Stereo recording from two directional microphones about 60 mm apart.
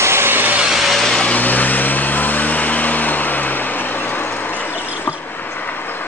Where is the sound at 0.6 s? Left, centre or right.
Centre.